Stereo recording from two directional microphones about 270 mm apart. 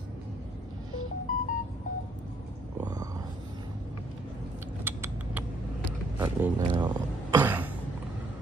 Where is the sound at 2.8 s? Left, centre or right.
Centre.